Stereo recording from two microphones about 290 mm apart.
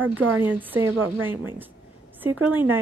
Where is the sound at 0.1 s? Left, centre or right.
Right.